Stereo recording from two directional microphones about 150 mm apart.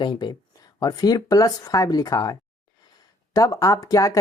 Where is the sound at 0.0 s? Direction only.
30° left (ahead or behind).